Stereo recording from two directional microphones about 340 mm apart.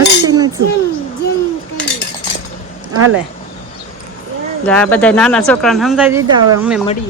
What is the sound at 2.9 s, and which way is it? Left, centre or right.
Speech, right.